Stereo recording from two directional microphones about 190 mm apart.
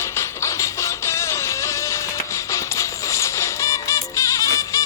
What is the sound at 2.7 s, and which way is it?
Music, 15° left (ahead or behind).